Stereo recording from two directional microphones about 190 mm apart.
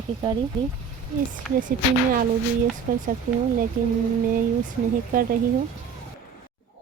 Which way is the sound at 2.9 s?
50° right (ahead or behind).